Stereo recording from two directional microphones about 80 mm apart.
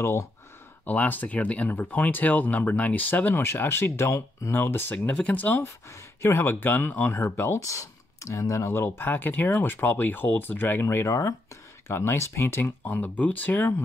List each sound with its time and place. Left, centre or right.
0.0 s speech: left
0.8 s speech: left
4.9 s speech: centre
5.6 s speech: left
7.6 s speech: left